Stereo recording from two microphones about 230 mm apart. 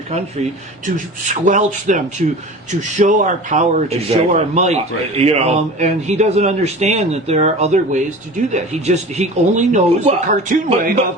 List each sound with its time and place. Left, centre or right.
1.3 s a man's voice: right